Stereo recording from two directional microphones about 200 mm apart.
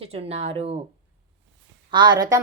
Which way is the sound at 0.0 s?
30° right (ahead or behind).